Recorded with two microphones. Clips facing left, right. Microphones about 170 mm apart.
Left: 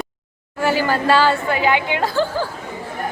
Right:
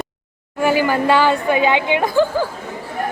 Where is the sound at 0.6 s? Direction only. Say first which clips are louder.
Right 2 dB; 15° right (ahead or behind).